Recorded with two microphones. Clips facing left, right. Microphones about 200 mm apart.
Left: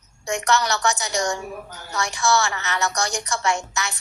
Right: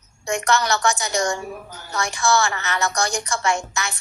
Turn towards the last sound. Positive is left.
turn(degrees=-50)  # may be behind; listen again after turning